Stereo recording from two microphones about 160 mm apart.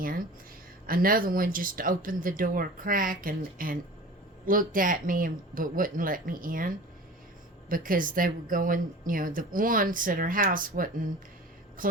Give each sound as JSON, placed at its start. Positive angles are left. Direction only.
{"t": 0.9, "sound": "speech", "side_deg": -65}